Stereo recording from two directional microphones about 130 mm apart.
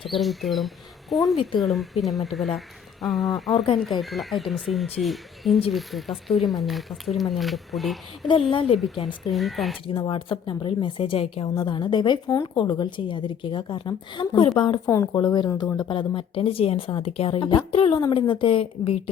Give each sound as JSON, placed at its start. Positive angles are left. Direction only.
{"t": 0.0, "sound": "speech", "side_deg": 0}
{"t": 8.3, "sound": "a woman's voice", "side_deg": 45}
{"t": 9.3, "sound": "speech", "side_deg": 0}
{"t": 9.8, "sound": "a woman's voice", "side_deg": 40}
{"t": 14.8, "sound": "speech", "side_deg": 20}
{"t": 15.2, "sound": "speech", "side_deg": 35}
{"t": 15.9, "sound": "a woman's voice", "side_deg": 40}